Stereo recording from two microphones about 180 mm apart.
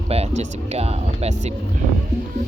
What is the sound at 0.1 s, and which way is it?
Speech, 35° right (ahead or behind).